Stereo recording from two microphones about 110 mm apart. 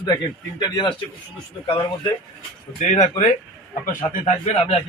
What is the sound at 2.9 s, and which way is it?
A man's voice, 90° left.